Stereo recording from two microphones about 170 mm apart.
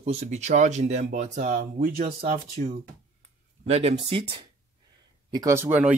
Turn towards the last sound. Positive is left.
turn(degrees=-10)  # may be behind; listen again after turning